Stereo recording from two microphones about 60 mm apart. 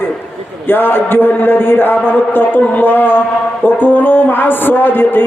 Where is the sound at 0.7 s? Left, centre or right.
Left.